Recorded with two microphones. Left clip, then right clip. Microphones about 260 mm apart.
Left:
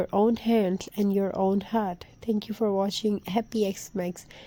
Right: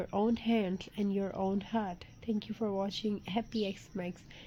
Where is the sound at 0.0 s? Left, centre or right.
Left.